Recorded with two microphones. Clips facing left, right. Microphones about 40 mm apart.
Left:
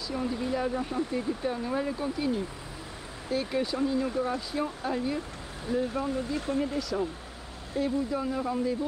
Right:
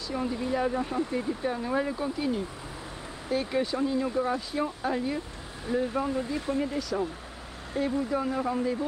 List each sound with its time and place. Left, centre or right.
0.1 s speech: centre
4.1 s speech: right
4.6 s speech: centre